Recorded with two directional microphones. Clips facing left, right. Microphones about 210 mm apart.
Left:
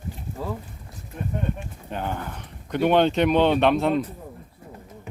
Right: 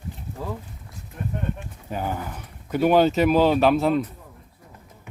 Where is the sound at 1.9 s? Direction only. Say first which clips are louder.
Right 1 dB; 5° right (ahead or behind).